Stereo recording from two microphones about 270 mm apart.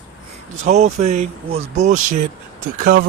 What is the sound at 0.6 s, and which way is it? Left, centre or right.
A man's voice, right.